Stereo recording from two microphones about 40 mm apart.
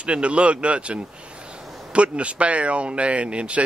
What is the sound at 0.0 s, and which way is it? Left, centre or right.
Speech, right.